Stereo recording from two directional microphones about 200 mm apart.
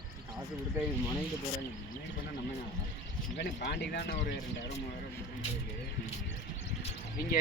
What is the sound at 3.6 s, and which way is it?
Speech, 55° left (ahead or behind).